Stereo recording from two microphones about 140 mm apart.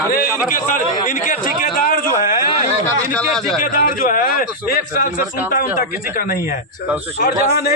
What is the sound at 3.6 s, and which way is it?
A man's voice, 75° left (ahead or behind).